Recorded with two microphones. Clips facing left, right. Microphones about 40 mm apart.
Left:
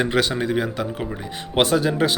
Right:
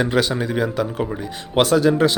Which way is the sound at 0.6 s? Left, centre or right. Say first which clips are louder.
Right 4 dB; centre.